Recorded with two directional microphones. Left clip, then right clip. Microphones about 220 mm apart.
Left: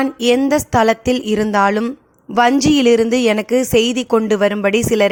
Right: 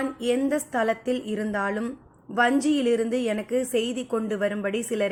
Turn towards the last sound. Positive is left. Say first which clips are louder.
# left 12 dB
turn(degrees=45)  # may be behind; listen again after turning